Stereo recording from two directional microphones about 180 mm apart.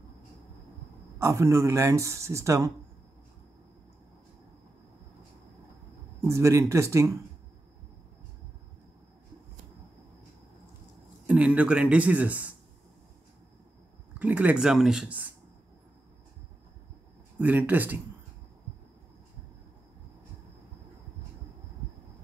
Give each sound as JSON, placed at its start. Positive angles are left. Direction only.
{"t": 1.2, "sound": "speech", "side_deg": -15}
{"t": 6.2, "sound": "speech", "side_deg": -15}
{"t": 11.2, "sound": "speech", "side_deg": -5}
{"t": 14.1, "sound": "speech", "side_deg": -10}
{"t": 17.4, "sound": "speech", "side_deg": -10}